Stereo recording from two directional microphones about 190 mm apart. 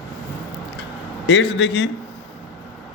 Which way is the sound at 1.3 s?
70° left (ahead or behind).